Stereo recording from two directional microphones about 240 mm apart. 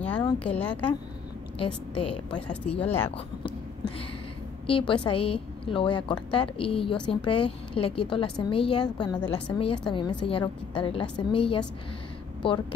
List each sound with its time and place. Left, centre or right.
0.0 s a sound: centre
1.6 s a woman's voice: left
2.3 s speech: centre
4.6 s a woman's voice: left